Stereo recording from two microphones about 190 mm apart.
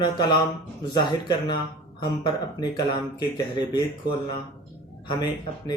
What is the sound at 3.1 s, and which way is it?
Speech, 20° left (ahead or behind).